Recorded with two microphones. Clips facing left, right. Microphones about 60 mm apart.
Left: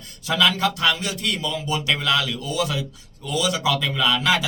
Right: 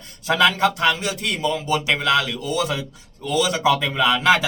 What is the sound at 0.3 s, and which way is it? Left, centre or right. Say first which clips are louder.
A man's voice: right 3 dB; right.